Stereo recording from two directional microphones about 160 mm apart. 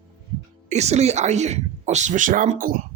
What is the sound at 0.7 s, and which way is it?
Speech, 45° right (ahead or behind).